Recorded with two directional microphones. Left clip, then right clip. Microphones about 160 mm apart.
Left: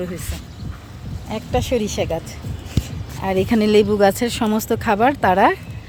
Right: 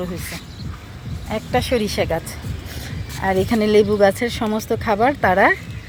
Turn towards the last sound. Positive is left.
turn(degrees=25)  # may be behind; listen again after turning